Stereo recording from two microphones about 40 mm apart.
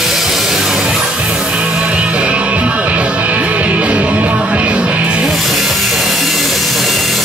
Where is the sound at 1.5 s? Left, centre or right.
Right.